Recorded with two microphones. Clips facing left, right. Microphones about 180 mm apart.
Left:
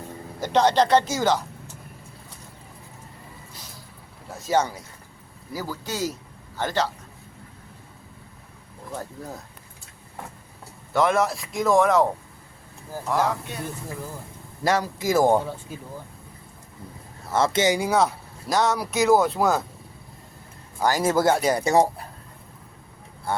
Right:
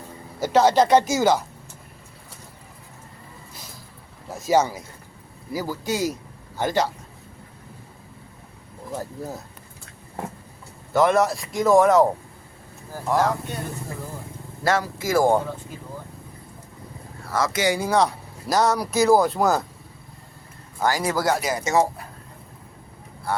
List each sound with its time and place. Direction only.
0.3 s speech: 5° right (ahead or behind)
4.3 s speech: 10° right (ahead or behind)
8.9 s speech: 5° right (ahead or behind)
10.9 s speech: centre (ahead or behind)
13.1 s speech: centre (ahead or behind)
14.6 s speech: 15° left (ahead or behind)
17.2 s speech: 25° left (ahead or behind)
17.7 s speech: 10° left (ahead or behind)
20.7 s speech: 20° left (ahead or behind); by 21.8 s 35° left (ahead or behind)